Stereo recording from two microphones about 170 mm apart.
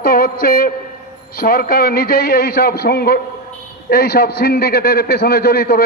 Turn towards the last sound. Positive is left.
turn(degrees=65)  # may be behind; listen again after turning